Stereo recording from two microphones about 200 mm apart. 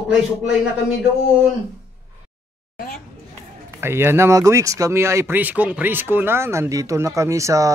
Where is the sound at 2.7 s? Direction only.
45° left (ahead or behind).